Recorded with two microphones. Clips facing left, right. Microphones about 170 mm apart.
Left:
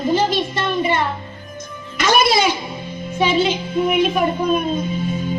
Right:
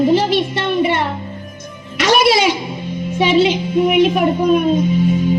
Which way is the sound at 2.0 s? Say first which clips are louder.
Right 3 dB; 75° right (ahead or behind).